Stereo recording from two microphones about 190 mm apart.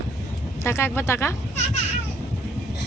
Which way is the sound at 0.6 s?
15° left (ahead or behind).